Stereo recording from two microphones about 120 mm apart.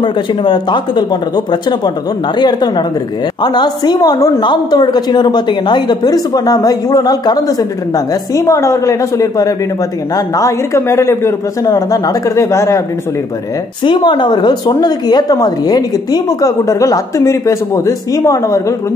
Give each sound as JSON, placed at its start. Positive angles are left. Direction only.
{"t": 0.0, "sound": "a man's voice", "side_deg": 40}
{"t": 13.8, "sound": "speech", "side_deg": 40}